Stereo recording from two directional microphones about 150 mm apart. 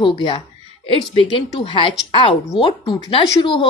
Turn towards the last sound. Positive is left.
turn(degrees=35)  # may be behind; listen again after turning